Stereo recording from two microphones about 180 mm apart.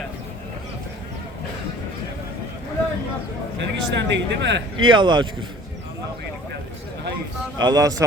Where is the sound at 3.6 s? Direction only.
75° right (ahead or behind).